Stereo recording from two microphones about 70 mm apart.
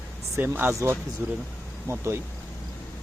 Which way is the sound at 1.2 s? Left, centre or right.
Right.